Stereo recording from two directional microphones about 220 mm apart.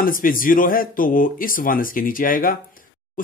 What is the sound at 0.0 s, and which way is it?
Speech, 40° left (ahead or behind).